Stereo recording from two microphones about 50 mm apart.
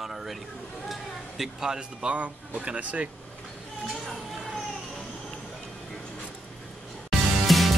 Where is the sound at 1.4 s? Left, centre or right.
Centre.